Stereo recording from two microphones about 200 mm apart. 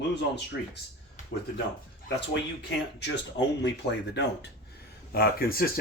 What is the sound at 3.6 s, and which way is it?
Speech, 60° left (ahead or behind).